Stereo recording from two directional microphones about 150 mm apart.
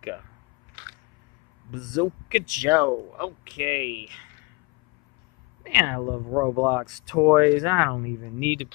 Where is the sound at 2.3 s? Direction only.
15° right (ahead or behind).